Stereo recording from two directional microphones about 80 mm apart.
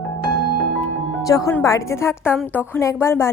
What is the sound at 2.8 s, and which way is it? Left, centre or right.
Speech, left.